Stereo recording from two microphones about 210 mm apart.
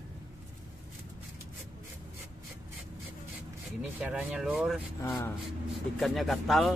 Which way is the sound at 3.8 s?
5° right (ahead or behind).